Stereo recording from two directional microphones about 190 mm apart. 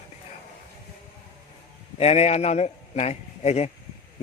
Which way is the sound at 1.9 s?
30° left (ahead or behind).